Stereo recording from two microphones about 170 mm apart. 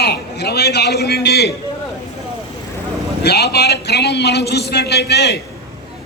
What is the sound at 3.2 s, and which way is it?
A man's voice, 75° left (ahead or behind).